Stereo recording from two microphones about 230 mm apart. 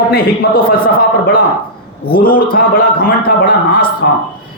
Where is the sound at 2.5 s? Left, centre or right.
Left.